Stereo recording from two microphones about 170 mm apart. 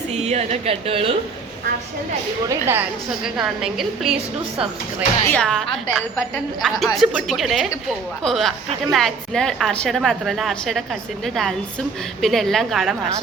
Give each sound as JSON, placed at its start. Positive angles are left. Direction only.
{"t": 0.1, "sound": "speech", "side_deg": -40}
{"t": 2.5, "sound": "a woman's voice", "side_deg": -15}
{"t": 3.2, "sound": "a woman's voice", "side_deg": -5}
{"t": 5.2, "sound": "a woman's voice", "side_deg": 10}
{"t": 12.2, "sound": "a woman's voice", "side_deg": 0}